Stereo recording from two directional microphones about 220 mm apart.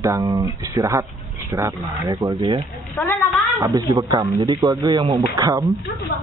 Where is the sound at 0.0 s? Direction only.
15° right (ahead or behind).